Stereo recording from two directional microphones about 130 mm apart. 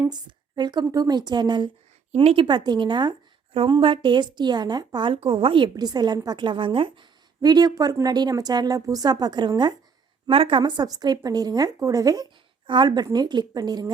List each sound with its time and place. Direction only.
0.0 s a woman's voice: 35° right (ahead or behind)